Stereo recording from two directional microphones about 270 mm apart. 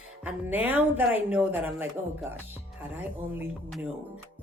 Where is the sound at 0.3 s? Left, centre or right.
Centre.